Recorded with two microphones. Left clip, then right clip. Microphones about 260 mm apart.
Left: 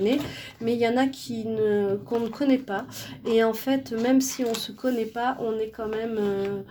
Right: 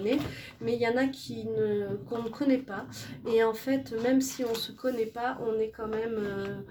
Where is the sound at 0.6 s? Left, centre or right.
Left.